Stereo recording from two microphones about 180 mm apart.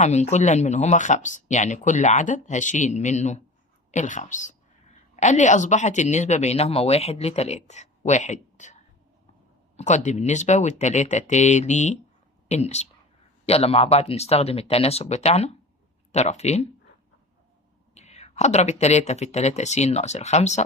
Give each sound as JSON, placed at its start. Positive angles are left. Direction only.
{"t": 0.0, "sound": "a woman's voice", "side_deg": 40}
{"t": 9.7, "sound": "a woman's voice", "side_deg": 40}
{"t": 17.9, "sound": "a woman's voice", "side_deg": 40}